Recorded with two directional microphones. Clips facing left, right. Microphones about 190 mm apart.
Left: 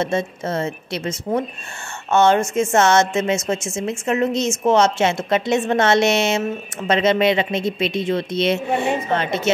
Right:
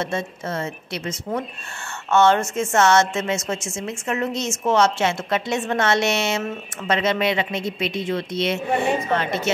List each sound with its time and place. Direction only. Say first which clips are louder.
0.0 s a woman's voice: left 5 dB; 25° left (ahead or behind)
2.0 s a woman's voice: left 2 dB; 15° left (ahead or behind)